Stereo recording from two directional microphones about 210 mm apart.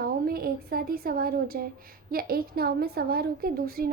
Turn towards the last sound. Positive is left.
turn(degrees=-45)  # may be behind; listen again after turning